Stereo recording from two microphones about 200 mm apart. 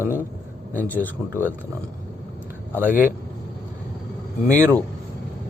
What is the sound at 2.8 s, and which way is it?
Speech, 10° right (ahead or behind).